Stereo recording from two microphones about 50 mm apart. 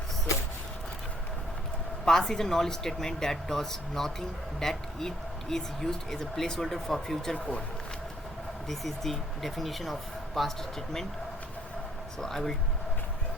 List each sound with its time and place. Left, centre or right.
2.0 s speech: centre
7.3 s speech: left
8.6 s speech: centre
12.2 s speech: centre